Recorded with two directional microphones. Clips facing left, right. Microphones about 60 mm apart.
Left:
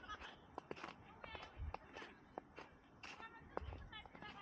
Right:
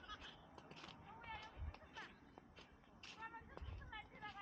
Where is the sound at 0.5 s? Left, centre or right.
Left.